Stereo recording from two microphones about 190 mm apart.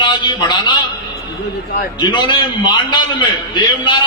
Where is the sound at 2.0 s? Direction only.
20° left (ahead or behind).